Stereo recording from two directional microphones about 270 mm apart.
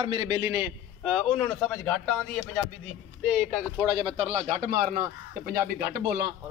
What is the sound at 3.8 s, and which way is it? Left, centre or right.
Speech, centre.